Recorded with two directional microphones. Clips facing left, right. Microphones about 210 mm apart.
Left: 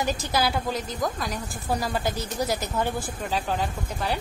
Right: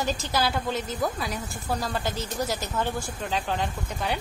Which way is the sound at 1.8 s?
10° left (ahead or behind).